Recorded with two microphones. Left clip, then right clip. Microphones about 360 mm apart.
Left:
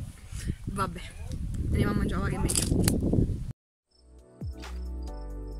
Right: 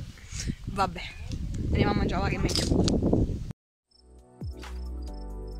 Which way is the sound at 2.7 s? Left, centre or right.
Right.